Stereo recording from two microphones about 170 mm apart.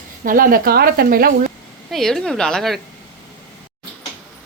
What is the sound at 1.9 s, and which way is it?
Speech, centre (ahead or behind).